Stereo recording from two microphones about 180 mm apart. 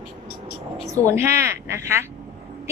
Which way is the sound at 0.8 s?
40° left (ahead or behind).